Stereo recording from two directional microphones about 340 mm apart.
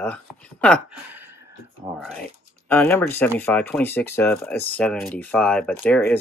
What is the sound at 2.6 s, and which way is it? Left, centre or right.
Speech, centre.